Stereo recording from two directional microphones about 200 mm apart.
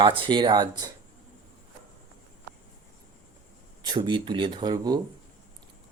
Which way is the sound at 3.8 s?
25° right (ahead or behind).